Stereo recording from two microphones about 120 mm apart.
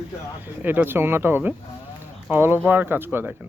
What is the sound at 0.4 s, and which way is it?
Speech, 15° right (ahead or behind).